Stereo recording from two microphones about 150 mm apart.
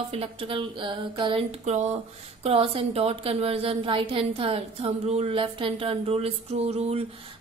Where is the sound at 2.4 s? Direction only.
40° right (ahead or behind).